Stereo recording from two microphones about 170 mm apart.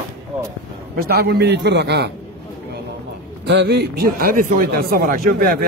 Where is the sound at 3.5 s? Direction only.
75° right (ahead or behind); by 5.6 s 60° right (ahead or behind).